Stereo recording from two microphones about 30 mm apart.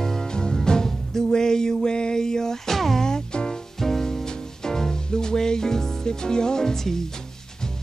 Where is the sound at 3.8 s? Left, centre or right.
Centre.